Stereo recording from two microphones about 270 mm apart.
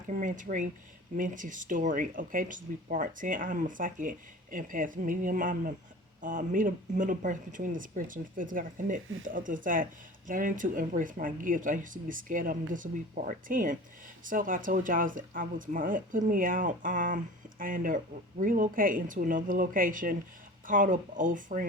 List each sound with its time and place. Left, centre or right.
0.1 s speech: right